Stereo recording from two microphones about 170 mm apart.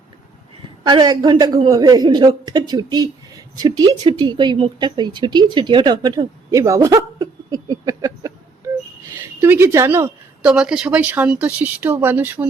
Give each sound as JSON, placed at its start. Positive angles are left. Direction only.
{"t": 0.9, "sound": "a man's voice", "side_deg": -25}
{"t": 8.6, "sound": "a sound", "side_deg": -20}
{"t": 9.4, "sound": "speech", "side_deg": -15}